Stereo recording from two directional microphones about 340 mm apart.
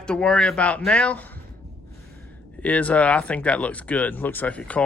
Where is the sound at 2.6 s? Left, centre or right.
Centre.